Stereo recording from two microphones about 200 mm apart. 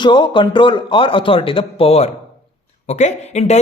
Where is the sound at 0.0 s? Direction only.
25° left (ahead or behind).